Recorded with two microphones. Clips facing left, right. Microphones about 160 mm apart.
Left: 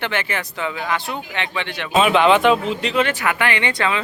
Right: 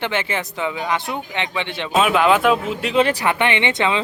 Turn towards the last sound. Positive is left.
turn(degrees=-25)  # may be behind; listen again after turning